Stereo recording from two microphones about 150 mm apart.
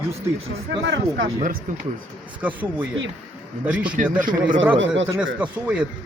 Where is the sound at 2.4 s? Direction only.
10° right (ahead or behind).